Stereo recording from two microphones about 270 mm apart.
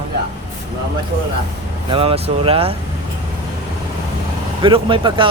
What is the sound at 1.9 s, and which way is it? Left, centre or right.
Speech, centre.